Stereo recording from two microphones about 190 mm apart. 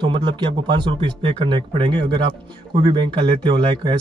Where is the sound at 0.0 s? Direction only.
25° right (ahead or behind).